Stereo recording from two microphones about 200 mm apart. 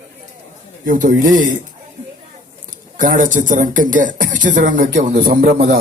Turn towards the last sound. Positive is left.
turn(degrees=-50)  # may be behind; listen again after turning